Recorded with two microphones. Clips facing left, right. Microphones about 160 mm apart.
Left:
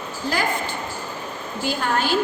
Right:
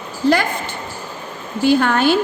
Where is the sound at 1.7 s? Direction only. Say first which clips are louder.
Right 4 dB; 75° right (ahead or behind).